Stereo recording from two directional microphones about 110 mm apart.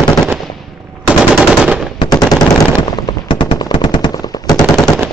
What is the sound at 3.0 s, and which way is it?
Gunshot, 45° left (ahead or behind).